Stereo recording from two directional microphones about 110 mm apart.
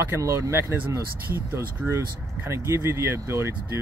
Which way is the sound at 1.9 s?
25° right (ahead or behind).